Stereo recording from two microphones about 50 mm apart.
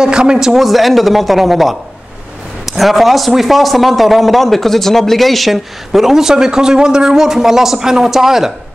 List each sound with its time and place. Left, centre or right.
0.0 s a man's voice: centre
0.7 s a man's voice: centre